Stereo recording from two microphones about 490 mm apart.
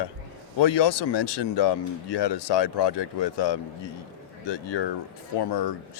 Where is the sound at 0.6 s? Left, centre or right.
Left.